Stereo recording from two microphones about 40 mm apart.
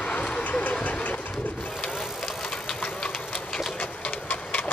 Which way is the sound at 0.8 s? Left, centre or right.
Left.